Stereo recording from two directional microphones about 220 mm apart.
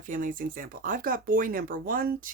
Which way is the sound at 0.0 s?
35° right (ahead or behind).